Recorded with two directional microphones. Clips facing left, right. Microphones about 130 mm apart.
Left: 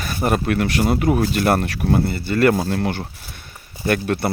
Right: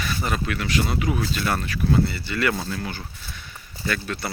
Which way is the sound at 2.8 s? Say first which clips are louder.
Left 9 dB; 65° left (ahead or behind).